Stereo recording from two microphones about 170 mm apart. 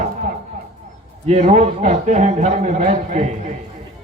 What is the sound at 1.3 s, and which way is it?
A man's voice, 40° right (ahead or behind).